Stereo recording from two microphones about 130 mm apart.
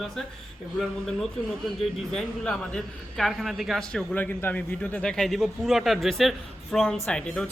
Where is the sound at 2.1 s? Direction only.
5° left (ahead or behind).